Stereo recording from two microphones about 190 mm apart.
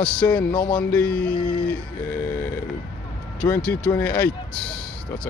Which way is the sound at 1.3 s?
25° left (ahead or behind).